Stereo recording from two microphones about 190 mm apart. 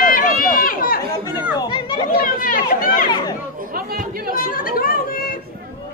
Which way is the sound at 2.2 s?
50° left (ahead or behind).